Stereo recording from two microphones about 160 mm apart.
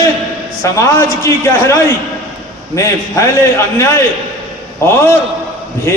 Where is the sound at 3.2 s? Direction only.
15° left (ahead or behind).